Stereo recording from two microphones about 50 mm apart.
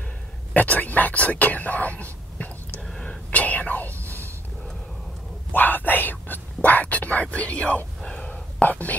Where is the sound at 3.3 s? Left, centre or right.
Left.